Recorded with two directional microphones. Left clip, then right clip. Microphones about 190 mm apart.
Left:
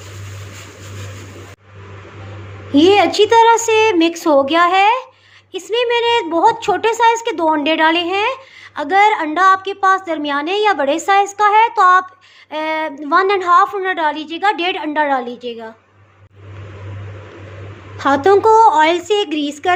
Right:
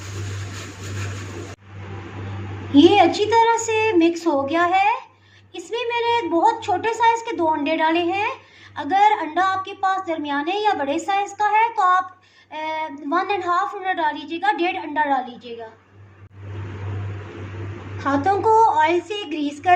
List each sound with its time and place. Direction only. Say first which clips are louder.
2.7 s a woman's voice: left 3 dB; 35° left (ahead or behind)
17.9 s a woman's voice: left 8 dB; 55° left (ahead or behind)